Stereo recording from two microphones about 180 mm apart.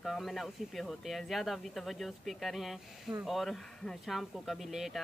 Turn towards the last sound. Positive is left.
turn(degrees=0)  # may be behind; listen again after turning